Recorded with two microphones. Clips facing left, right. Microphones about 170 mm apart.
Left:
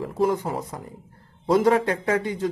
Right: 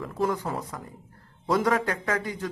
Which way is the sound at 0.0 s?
30° left (ahead or behind).